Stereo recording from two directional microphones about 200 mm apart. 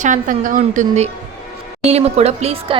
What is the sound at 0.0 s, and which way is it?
A woman's voice, 40° right (ahead or behind).